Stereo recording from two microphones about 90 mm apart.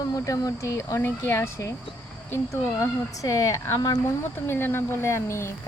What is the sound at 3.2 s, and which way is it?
Speech, 40° left (ahead or behind).